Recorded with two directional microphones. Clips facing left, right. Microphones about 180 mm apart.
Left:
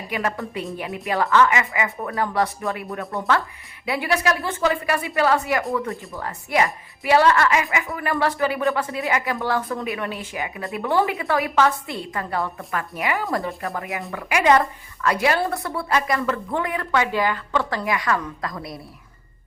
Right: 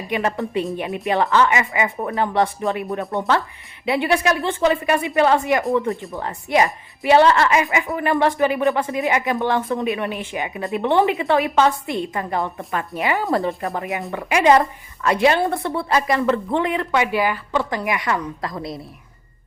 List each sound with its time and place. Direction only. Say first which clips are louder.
0.1 s speech: right 4 dB; 25° right (ahead or behind)